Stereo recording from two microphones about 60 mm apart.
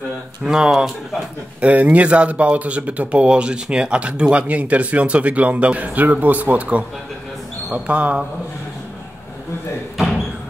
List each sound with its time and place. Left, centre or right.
0.5 s speech: centre
1.6 s speech: right
9.9 s a sound: centre